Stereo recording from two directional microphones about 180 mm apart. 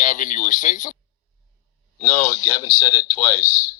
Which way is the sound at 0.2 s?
45° left (ahead or behind).